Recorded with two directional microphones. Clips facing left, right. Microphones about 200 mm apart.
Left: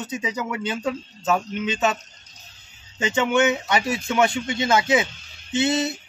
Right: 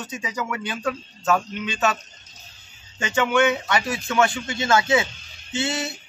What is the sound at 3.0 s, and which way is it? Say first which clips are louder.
A man's voice: even; 20° left (ahead or behind).